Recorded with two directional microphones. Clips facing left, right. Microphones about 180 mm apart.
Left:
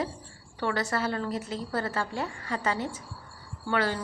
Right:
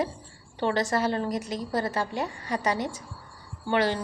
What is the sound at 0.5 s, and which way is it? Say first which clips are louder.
A woman's voice: right 4 dB; 25° right (ahead or behind).